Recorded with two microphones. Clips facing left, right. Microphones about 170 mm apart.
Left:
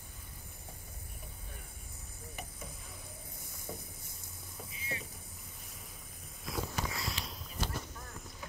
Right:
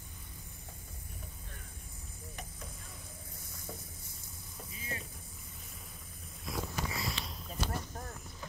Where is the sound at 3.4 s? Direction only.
15° left (ahead or behind).